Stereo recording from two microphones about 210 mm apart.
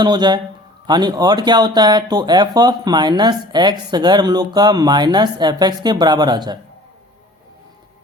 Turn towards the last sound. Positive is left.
turn(degrees=-20)  # may be behind; listen again after turning